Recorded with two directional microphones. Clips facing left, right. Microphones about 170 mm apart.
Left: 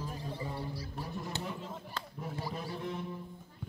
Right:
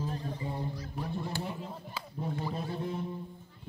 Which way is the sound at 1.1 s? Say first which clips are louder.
Right 6 dB; 30° right (ahead or behind).